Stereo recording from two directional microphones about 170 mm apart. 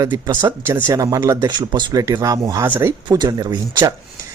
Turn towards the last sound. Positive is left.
turn(degrees=-25)  # may be behind; listen again after turning